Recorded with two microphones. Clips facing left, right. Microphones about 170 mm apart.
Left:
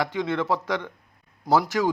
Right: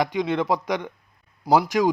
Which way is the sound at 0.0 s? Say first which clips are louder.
Right 3 dB; 15° right (ahead or behind).